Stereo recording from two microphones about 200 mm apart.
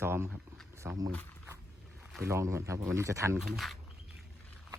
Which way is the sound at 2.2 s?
15° right (ahead or behind).